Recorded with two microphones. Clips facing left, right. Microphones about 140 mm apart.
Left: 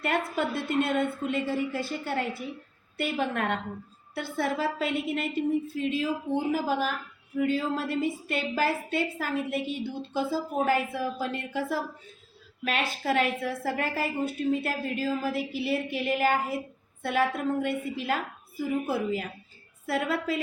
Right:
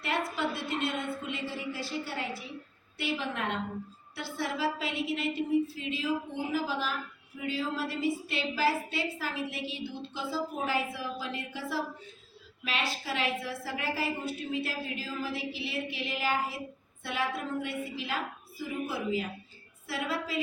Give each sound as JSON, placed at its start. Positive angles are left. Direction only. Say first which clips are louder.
{"t": 0.0, "sound": "a woman's voice", "louder": "left 4 dB", "side_deg": 50}